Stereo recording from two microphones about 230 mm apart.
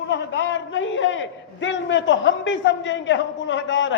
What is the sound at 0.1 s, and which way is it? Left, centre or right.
A man's voice, left.